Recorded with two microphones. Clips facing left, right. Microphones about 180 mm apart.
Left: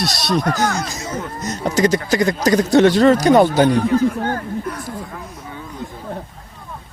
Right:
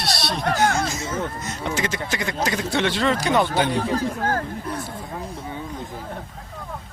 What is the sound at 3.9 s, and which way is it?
Speech, 35° right (ahead or behind).